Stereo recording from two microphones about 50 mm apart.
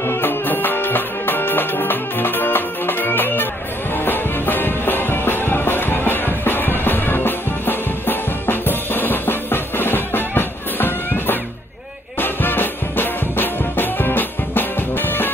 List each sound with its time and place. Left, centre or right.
0.0 s music: left